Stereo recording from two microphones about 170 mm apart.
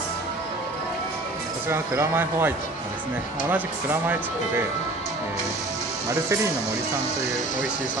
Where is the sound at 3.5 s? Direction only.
10° right (ahead or behind).